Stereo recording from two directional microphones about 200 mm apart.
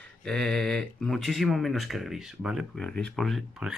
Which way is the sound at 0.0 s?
5° left (ahead or behind).